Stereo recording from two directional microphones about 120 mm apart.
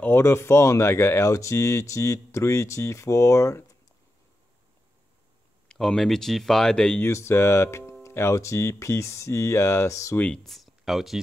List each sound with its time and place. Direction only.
0.0 s speech: 20° left (ahead or behind)
5.7 s speech: 5° left (ahead or behind)
7.0 s speech: 20° left (ahead or behind)
10.1 s speech: 10° left (ahead or behind)